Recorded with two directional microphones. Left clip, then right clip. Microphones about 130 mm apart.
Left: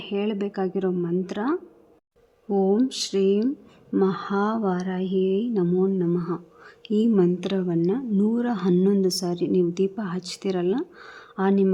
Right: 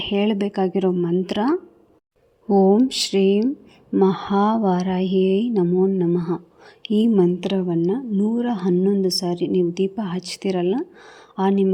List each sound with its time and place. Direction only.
0.0 s speech: 30° right (ahead or behind)
5.5 s a woman's voice: 10° right (ahead or behind)
6.1 s a woman's voice: 25° right (ahead or behind)
8.2 s a woman's voice: 5° left (ahead or behind)